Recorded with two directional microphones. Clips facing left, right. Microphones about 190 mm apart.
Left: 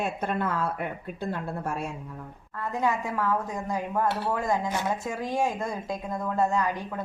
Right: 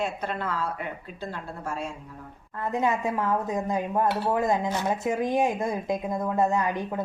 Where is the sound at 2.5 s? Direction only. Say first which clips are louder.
Right 2 dB; 20° right (ahead or behind).